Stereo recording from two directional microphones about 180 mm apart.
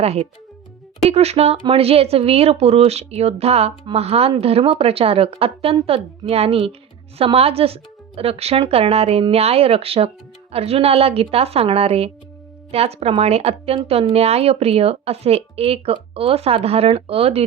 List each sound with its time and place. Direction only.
0.0 s speech: 35° right (ahead or behind)